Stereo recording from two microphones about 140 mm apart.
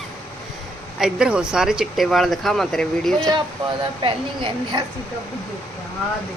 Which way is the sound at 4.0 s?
35° right (ahead or behind).